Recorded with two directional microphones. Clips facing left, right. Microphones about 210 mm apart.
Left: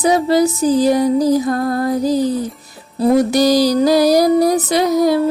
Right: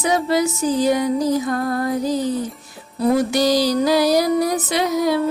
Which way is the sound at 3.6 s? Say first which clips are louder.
Left 4 dB; 40° left (ahead or behind).